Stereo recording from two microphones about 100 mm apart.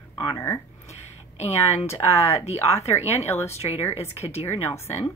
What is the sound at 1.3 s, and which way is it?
Speech, 90° left.